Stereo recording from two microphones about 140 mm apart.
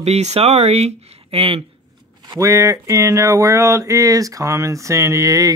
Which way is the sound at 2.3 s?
25° right (ahead or behind).